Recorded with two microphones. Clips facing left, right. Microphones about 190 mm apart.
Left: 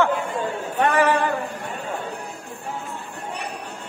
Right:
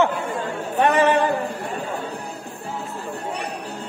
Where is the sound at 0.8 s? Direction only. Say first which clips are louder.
Right 2 dB; 20° right (ahead or behind).